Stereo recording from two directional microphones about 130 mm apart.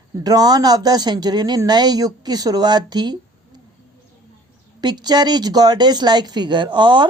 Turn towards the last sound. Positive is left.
turn(degrees=-35)  # may be behind; listen again after turning